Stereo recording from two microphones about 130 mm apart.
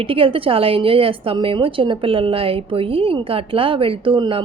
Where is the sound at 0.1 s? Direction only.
45° right (ahead or behind).